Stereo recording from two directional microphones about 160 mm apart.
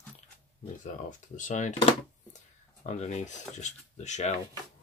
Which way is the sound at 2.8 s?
45° left (ahead or behind).